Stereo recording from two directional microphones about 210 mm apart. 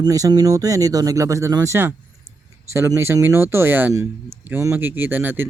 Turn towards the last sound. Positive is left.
turn(degrees=-10)  # may be behind; listen again after turning